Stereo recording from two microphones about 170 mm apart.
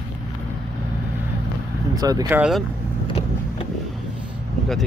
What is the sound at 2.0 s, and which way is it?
Speech, 20° right (ahead or behind).